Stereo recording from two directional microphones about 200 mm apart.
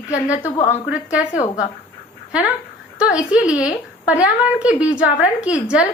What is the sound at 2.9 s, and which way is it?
A woman's voice, 5° right (ahead or behind).